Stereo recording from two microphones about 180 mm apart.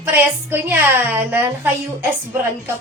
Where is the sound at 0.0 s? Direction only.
10° right (ahead or behind).